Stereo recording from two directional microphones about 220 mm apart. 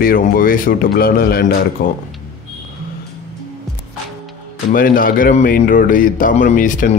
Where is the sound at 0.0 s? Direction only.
40° left (ahead or behind).